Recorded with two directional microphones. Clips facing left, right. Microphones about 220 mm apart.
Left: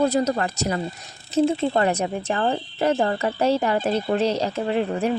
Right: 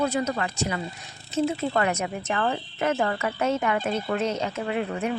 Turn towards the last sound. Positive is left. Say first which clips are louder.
# left 5 dB
turn(degrees=30)  # may be behind; listen again after turning